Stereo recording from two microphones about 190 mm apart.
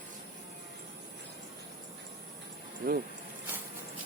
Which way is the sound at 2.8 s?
50° right (ahead or behind).